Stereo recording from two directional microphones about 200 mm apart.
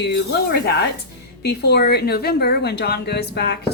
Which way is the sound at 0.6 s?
55° left (ahead or behind).